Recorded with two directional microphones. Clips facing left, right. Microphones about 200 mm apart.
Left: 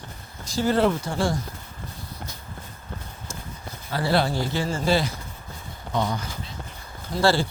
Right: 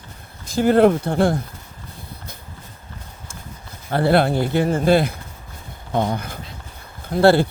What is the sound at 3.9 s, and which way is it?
Speech, 55° right (ahead or behind).